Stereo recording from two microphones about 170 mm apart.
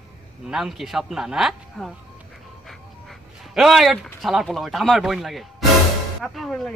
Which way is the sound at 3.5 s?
Centre (ahead or behind).